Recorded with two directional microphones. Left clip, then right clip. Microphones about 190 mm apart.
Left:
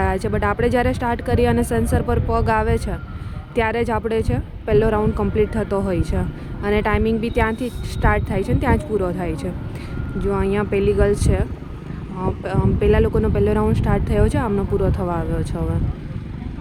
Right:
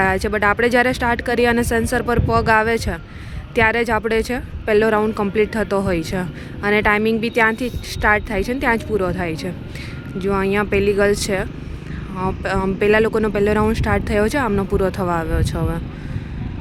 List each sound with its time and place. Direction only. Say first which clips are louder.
0.0 s speech: right 4 dB; centre (ahead or behind)